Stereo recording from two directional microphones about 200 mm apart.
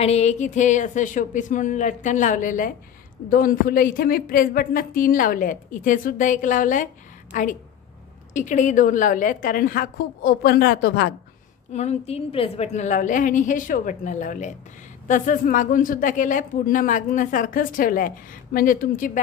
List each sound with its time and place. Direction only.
0.0 s a woman's voice: 30° left (ahead or behind); by 11.1 s 50° left (ahead or behind)
11.7 s speech: 35° left (ahead or behind)